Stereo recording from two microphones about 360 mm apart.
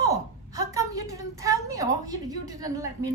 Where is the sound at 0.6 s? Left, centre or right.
Centre.